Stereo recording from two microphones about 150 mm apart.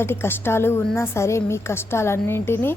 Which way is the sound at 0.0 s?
15° left (ahead or behind).